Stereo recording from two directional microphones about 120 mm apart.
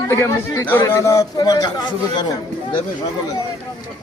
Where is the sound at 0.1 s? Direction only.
20° left (ahead or behind).